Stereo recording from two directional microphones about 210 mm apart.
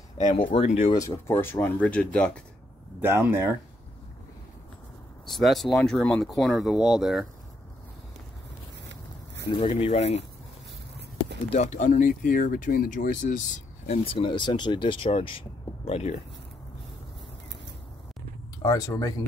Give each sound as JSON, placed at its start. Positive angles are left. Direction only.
{"t": 0.2, "sound": "speech", "side_deg": 25}
{"t": 0.9, "sound": "speech", "side_deg": 15}
{"t": 3.0, "sound": "speech", "side_deg": -10}
{"t": 5.3, "sound": "speech", "side_deg": 0}
{"t": 9.5, "sound": "speech", "side_deg": 25}
{"t": 11.5, "sound": "speech", "side_deg": 30}
{"t": 18.6, "sound": "speech", "side_deg": 15}